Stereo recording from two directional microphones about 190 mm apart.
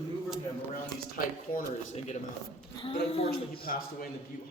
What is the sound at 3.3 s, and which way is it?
Speech, 50° left (ahead or behind).